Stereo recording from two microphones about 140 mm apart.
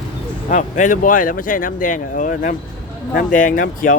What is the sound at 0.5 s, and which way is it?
Speech, 65° left (ahead or behind).